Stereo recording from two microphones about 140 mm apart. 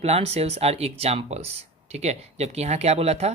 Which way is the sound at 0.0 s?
50° right (ahead or behind).